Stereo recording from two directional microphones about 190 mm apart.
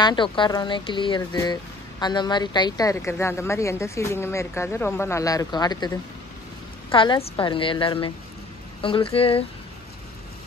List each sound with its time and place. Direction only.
0.0 s a woman's voice: 25° left (ahead or behind)